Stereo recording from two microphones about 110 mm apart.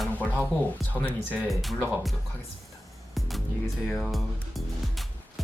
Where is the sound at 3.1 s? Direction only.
Centre (ahead or behind).